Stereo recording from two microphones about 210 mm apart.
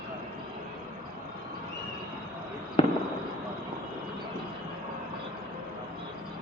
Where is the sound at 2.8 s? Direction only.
25° left (ahead or behind).